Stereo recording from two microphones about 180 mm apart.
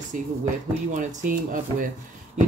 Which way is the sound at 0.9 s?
45° right (ahead or behind).